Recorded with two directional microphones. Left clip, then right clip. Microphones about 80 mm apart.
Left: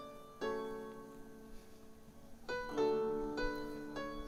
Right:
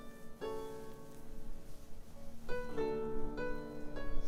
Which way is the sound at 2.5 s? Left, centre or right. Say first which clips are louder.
Left 3 dB; left.